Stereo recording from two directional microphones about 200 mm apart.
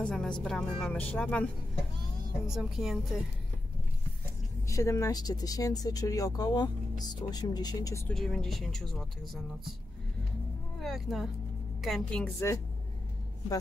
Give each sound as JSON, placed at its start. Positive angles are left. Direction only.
{"t": 0.0, "sound": "speech", "side_deg": 5}
{"t": 2.5, "sound": "speech", "side_deg": 0}
{"t": 4.6, "sound": "speech", "side_deg": 15}
{"t": 8.1, "sound": "speech", "side_deg": 0}
{"t": 10.8, "sound": "speech", "side_deg": 0}